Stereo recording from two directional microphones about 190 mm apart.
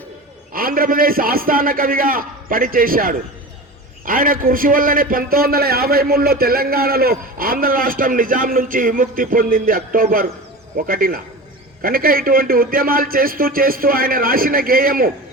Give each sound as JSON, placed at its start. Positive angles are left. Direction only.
{"t": 0.5, "sound": "a man's voice", "side_deg": -50}